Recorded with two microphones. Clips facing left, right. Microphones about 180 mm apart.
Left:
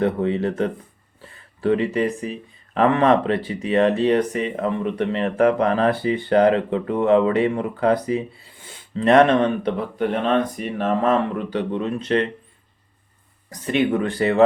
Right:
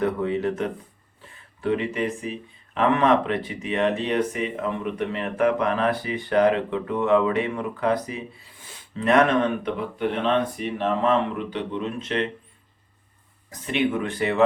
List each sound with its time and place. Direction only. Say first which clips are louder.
0.0 s speech: left 3 dB; 30° left (ahead or behind)
13.5 s speech: left 4 dB; 40° left (ahead or behind)